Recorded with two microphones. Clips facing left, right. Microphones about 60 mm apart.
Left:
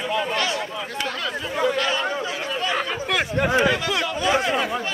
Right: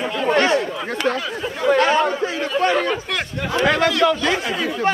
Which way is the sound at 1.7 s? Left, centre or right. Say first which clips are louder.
Right 8 dB; right.